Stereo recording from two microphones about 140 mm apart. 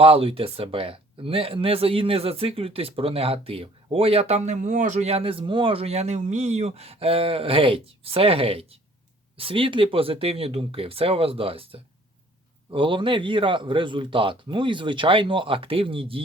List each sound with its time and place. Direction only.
0.0 s a man's voice: 40° right (ahead or behind)